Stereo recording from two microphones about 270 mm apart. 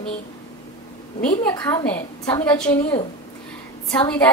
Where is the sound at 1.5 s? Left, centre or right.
Centre.